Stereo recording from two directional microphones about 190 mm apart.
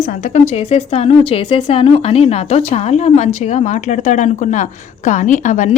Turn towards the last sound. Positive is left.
turn(degrees=40)  # may be behind; listen again after turning